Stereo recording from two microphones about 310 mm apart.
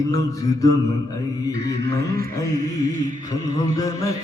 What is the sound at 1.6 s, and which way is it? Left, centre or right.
Music, right.